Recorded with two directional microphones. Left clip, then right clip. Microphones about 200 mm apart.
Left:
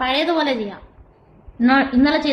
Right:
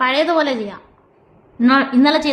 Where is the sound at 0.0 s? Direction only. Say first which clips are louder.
Right 3 dB; 15° right (ahead or behind).